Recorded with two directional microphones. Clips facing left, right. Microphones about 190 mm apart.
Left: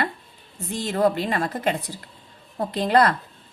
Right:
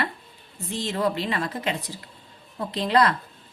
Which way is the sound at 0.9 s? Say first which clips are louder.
Left 4 dB; 50° left (ahead or behind).